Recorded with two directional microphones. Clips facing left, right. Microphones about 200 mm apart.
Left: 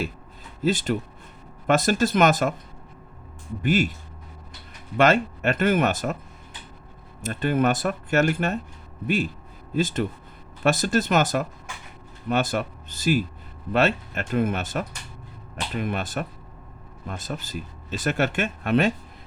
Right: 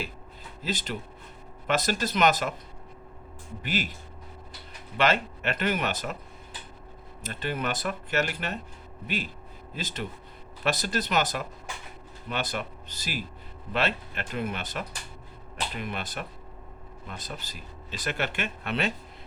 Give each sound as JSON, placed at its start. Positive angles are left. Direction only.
{"t": 0.6, "sound": "speech", "side_deg": 50}
{"t": 3.6, "sound": "speech", "side_deg": 50}
{"t": 4.9, "sound": "speech", "side_deg": 45}
{"t": 7.2, "sound": "speech", "side_deg": 50}